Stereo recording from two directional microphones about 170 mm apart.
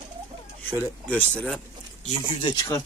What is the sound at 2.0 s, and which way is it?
Speech, 30° left (ahead or behind).